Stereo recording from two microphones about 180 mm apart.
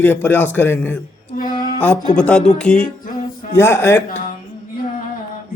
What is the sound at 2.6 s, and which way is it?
Music, 5° left (ahead or behind).